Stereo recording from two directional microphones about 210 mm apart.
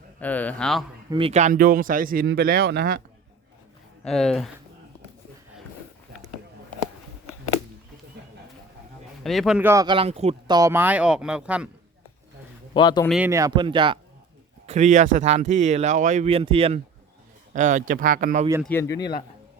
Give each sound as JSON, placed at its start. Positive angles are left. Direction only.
{"t": 0.2, "sound": "a man's voice", "side_deg": 5}
{"t": 1.1, "sound": "speech", "side_deg": -30}
{"t": 4.0, "sound": "speech", "side_deg": 5}
{"t": 9.2, "sound": "speech", "side_deg": 0}
{"t": 9.8, "sound": "speech", "side_deg": -25}
{"t": 12.7, "sound": "speech", "side_deg": 20}
{"t": 13.1, "sound": "speech", "side_deg": -5}
{"t": 14.7, "sound": "speech", "side_deg": -35}
{"t": 18.6, "sound": "a man's voice", "side_deg": 10}